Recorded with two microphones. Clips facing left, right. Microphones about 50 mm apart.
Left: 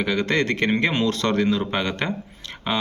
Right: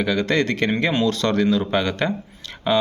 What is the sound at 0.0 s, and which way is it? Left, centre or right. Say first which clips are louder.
Speech: right 2 dB; left.